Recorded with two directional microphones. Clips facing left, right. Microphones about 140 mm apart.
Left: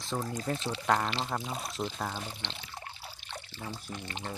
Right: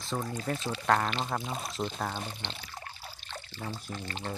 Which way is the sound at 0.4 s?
20° left (ahead or behind).